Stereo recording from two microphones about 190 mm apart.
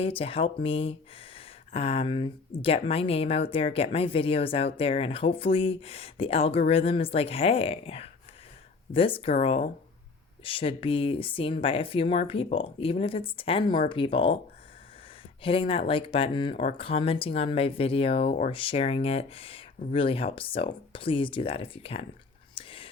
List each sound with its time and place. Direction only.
0.0 s speech: 30° left (ahead or behind)
15.4 s speech: 30° left (ahead or behind)
22.5 s whispering: 30° left (ahead or behind)